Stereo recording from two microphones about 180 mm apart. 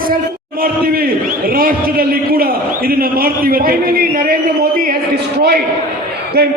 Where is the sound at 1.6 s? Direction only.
55° right (ahead or behind).